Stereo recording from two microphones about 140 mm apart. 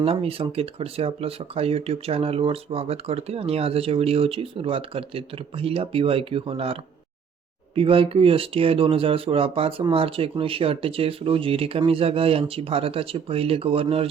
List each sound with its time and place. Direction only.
0.0 s speech: 45° right (ahead or behind)
7.8 s speech: 40° right (ahead or behind)